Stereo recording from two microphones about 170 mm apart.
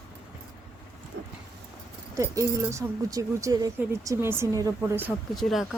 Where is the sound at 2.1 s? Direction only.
15° right (ahead or behind).